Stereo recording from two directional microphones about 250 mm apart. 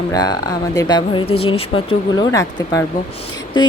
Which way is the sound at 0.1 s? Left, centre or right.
Centre.